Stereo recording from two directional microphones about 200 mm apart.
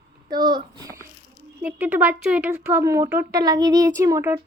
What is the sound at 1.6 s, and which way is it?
Speech, 10° right (ahead or behind).